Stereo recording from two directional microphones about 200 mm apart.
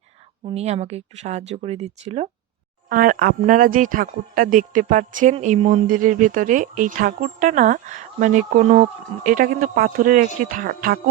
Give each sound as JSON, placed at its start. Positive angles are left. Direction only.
{"t": 0.4, "sound": "speech", "side_deg": -30}
{"t": 2.9, "sound": "speech", "side_deg": -45}
{"t": 5.9, "sound": "speech", "side_deg": -40}